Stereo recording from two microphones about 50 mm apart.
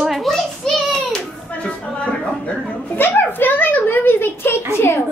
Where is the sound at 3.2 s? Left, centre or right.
Left.